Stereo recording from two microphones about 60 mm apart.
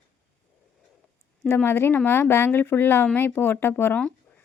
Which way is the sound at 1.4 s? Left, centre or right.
Left.